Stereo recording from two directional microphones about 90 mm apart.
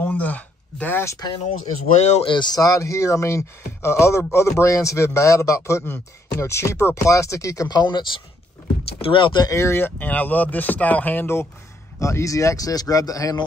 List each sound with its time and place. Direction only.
0.0 s a sound: 20° left (ahead or behind)
2.2 s speech: 55° left (ahead or behind)
2.6 s speech: 35° left (ahead or behind); by 9.4 s 65° left (ahead or behind)
9.4 s speech: 35° left (ahead or behind)
12.0 s speech: 35° left (ahead or behind)